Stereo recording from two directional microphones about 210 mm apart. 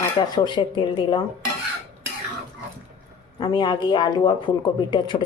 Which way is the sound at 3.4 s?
20° left (ahead or behind).